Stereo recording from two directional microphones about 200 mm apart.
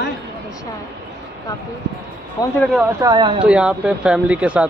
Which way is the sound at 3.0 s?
20° right (ahead or behind).